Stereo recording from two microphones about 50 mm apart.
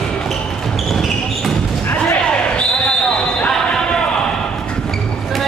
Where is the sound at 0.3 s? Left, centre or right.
Centre.